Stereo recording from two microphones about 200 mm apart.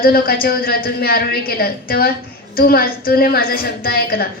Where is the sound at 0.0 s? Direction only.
45° left (ahead or behind).